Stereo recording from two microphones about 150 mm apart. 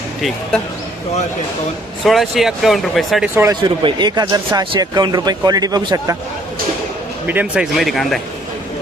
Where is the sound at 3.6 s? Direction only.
30° right (ahead or behind).